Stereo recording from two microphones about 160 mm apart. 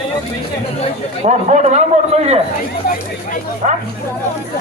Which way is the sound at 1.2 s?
45° right (ahead or behind).